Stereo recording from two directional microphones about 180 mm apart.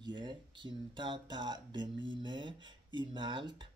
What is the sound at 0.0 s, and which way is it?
Speech, 25° right (ahead or behind).